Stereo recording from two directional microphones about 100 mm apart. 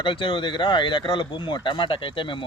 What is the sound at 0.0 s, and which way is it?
Speech, 55° left (ahead or behind).